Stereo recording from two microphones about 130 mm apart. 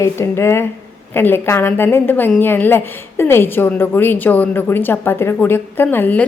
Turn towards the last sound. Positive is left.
turn(degrees=15)  # may be behind; listen again after turning